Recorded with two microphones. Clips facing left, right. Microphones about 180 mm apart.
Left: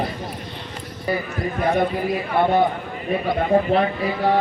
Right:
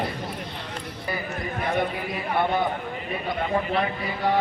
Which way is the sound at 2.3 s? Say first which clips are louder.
Left 5 dB; 50° left (ahead or behind).